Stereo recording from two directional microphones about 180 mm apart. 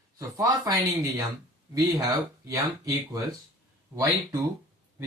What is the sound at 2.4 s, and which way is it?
Speech, 20° right (ahead or behind).